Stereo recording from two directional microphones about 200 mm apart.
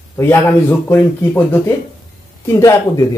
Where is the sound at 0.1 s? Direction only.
10° left (ahead or behind).